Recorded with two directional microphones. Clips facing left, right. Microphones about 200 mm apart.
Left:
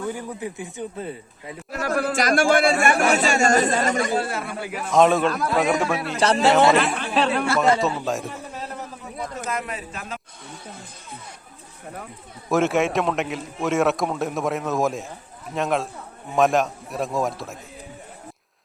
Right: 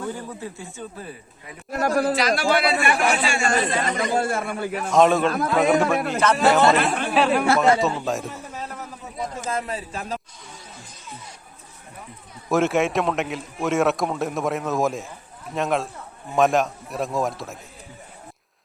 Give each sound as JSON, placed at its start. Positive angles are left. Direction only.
{"t": 0.1, "sound": "a man's voice", "side_deg": 15}
{"t": 1.7, "sound": "a man's voice", "side_deg": -40}
{"t": 2.1, "sound": "a man's voice", "side_deg": 50}
{"t": 4.1, "sound": "a man's voice", "side_deg": -50}
{"t": 4.9, "sound": "a man's voice", "side_deg": 0}
{"t": 9.5, "sound": "a man's voice", "side_deg": -30}
{"t": 12.5, "sound": "a man's voice", "side_deg": 0}